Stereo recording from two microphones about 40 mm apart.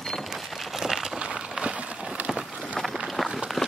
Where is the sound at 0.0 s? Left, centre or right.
Centre.